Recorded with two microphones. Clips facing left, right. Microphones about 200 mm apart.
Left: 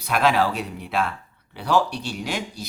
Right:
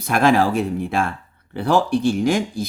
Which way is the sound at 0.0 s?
45° right (ahead or behind).